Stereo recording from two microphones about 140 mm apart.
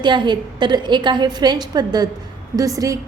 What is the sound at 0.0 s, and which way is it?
A woman's voice, 35° right (ahead or behind).